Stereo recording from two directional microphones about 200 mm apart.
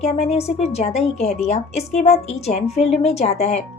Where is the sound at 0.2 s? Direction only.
30° left (ahead or behind).